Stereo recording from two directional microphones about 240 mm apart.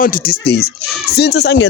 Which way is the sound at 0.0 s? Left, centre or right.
Left.